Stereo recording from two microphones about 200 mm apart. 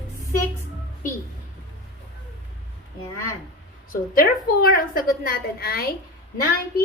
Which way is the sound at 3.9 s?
50° left (ahead or behind).